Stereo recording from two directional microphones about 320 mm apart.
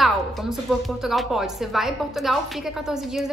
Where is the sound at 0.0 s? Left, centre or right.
Centre.